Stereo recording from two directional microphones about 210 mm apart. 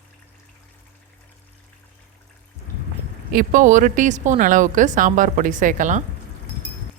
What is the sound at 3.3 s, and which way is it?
Speech, 40° right (ahead or behind).